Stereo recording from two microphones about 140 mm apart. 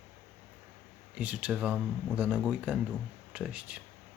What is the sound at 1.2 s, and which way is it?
Speech, 10° right (ahead or behind).